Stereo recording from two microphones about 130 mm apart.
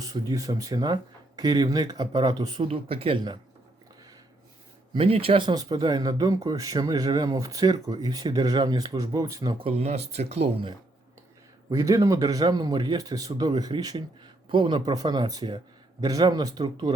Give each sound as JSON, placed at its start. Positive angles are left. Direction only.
{"t": 0.0, "sound": "speech", "side_deg": -25}
{"t": 2.6, "sound": "speech", "side_deg": -45}
{"t": 4.9, "sound": "speech", "side_deg": -50}
{"t": 9.6, "sound": "speech", "side_deg": -50}
{"t": 11.7, "sound": "speech", "side_deg": -25}